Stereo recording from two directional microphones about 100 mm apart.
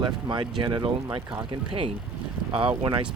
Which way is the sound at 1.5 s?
60° right (ahead or behind).